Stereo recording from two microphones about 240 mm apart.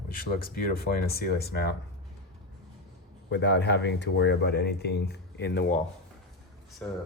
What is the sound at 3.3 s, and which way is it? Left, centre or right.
Speech, left.